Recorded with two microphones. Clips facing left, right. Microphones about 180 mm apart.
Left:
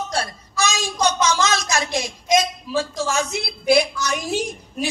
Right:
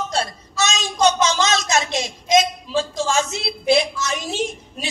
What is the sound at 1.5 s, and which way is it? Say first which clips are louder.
Speech: right 2 dB; 20° right (ahead or behind).